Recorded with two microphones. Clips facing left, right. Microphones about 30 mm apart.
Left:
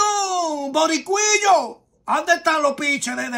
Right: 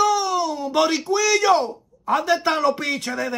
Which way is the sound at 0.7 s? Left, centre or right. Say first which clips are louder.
Even; right.